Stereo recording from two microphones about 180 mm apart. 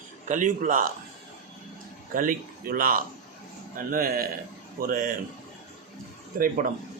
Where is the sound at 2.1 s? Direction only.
50° right (ahead or behind).